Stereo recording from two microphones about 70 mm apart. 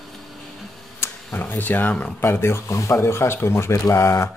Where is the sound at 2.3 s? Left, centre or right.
Left.